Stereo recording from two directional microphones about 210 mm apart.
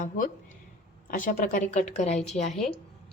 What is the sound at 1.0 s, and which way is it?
A woman's voice, 40° left (ahead or behind).